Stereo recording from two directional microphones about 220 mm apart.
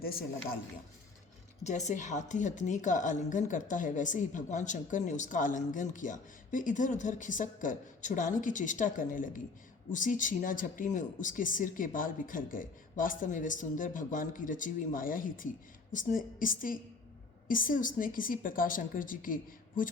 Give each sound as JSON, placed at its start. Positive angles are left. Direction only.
{"t": 0.0, "sound": "speech", "side_deg": 45}
{"t": 1.6, "sound": "a woman's voice", "side_deg": 30}